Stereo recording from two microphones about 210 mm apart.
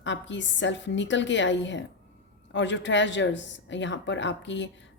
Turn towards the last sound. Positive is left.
turn(degrees=60)  # may be behind; listen again after turning